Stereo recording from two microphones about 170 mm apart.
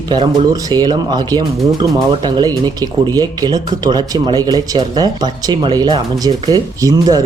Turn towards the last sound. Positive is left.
turn(degrees=-20)  # may be behind; listen again after turning